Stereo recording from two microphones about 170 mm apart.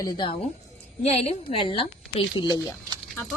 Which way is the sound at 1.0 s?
35° left (ahead or behind).